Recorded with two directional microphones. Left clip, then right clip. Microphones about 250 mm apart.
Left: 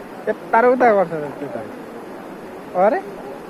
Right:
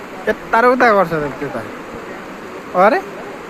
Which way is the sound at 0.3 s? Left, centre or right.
Right.